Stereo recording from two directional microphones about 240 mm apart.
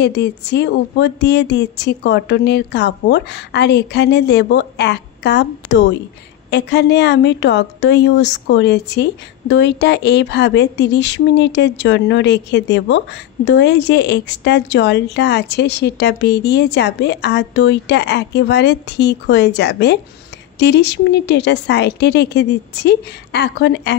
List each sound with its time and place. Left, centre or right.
0.0 s speech: left